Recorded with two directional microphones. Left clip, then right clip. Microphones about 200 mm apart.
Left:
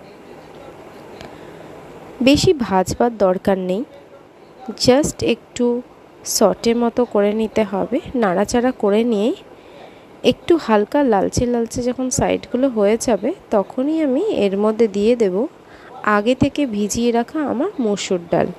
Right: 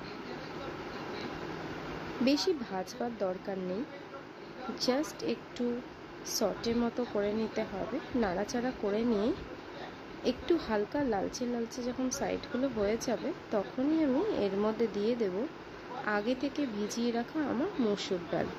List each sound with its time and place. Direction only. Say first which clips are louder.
2.2 s a woman's voice: left 16 dB; 50° left (ahead or behind)
4.8 s a woman's voice: left 17 dB; 45° left (ahead or behind)